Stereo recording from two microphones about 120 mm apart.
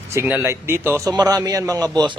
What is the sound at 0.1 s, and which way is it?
A man's voice, 20° right (ahead or behind).